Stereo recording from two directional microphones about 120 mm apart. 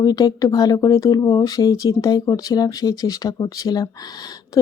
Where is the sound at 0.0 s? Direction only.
35° left (ahead or behind).